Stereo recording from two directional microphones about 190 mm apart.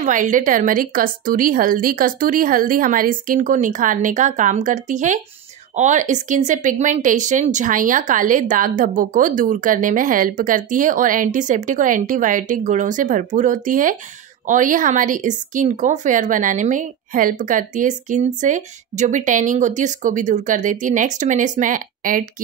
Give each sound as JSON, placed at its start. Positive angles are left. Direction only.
{"t": 0.0, "sound": "speech", "side_deg": -45}